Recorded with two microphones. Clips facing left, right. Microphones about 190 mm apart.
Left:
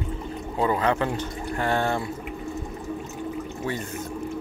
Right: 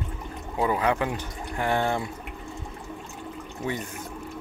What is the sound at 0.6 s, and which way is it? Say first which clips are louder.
Speech: left 1 dB; 10° right (ahead or behind).